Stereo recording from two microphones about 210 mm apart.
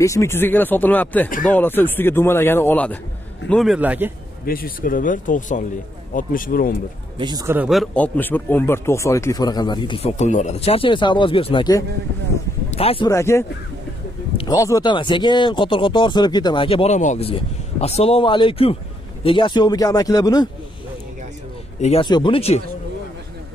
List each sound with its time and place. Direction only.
0.0 s a man's voice: 15° left (ahead or behind); by 4.1 s 5° right (ahead or behind)
4.5 s speech: 45° left (ahead or behind)
7.2 s speech: 20° right (ahead or behind); by 13.1 s 25° left (ahead or behind)
13.1 s speech: 15° left (ahead or behind)
14.3 s a sound: 25° left (ahead or behind)
14.6 s speech: 15° left (ahead or behind)
21.8 s speech: 25° left (ahead or behind)